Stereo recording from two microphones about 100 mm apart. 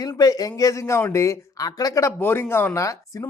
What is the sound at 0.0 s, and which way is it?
A man's voice, 40° left (ahead or behind).